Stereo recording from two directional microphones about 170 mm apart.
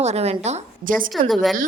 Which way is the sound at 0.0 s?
40° right (ahead or behind).